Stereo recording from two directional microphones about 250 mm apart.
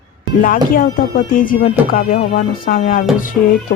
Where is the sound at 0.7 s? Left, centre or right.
Left.